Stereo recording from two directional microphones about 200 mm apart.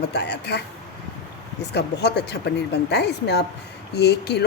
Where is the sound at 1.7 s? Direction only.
55° left (ahead or behind).